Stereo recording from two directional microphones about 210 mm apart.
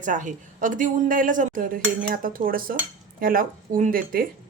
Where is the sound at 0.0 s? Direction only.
35° right (ahead or behind).